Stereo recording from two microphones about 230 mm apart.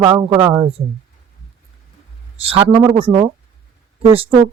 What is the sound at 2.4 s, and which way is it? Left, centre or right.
Speech, right.